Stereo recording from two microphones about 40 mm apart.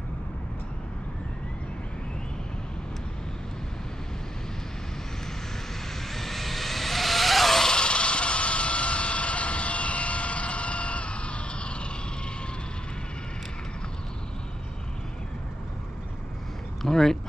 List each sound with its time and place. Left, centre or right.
6.0 s vehicle: centre
7.7 s vehicle: left
16.8 s a sound: centre